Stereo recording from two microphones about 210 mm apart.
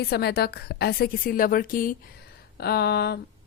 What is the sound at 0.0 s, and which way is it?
A woman's voice, 50° left (ahead or behind).